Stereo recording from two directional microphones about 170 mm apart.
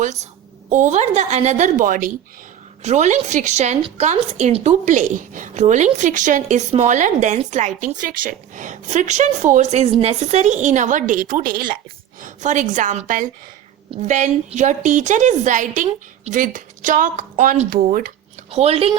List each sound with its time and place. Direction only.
0.0 s a woman's voice: 45° right (ahead or behind)
2.8 s a woman's voice: 40° right (ahead or behind)
18.5 s speech: 40° right (ahead or behind)